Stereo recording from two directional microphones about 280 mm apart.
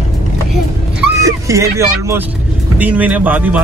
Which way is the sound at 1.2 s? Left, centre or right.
Centre.